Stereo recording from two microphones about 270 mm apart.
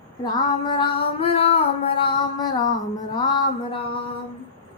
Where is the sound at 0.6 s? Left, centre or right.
Centre.